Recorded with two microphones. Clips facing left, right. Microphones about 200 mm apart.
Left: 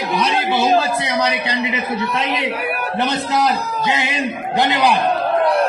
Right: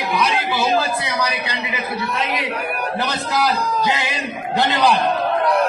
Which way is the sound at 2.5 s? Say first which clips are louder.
Left 1 dB; 5° left (ahead or behind).